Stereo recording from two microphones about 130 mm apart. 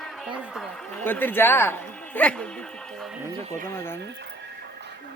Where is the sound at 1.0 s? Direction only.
15° left (ahead or behind).